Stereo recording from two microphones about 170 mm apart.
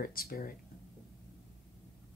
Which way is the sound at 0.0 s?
60° left (ahead or behind).